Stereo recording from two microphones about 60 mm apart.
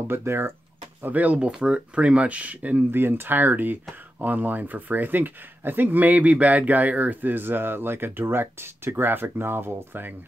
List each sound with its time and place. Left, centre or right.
0.1 s speech: right
1.0 s speech: right
3.0 s speech: right